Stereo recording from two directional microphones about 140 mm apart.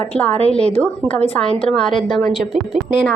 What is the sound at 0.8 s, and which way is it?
A woman's voice, 10° left (ahead or behind).